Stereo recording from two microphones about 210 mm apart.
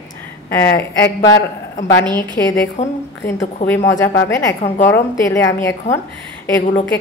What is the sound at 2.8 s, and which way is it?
Speech, 35° left (ahead or behind).